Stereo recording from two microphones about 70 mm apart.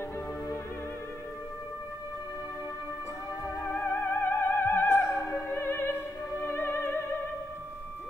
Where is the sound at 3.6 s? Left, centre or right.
Left.